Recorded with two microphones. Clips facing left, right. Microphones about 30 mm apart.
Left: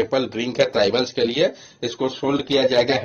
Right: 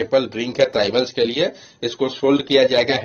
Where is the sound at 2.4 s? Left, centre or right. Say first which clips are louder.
Even; right.